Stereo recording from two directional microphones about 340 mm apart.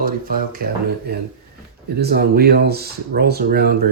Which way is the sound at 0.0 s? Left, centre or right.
Right.